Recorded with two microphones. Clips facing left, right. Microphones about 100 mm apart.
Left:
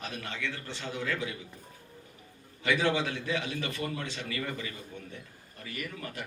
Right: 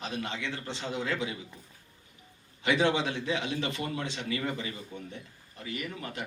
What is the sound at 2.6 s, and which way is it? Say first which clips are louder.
A man's voice: right 2 dB; 20° right (ahead or behind).